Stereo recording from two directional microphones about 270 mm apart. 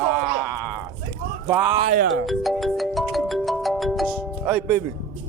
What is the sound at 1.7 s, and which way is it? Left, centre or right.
Speech, right.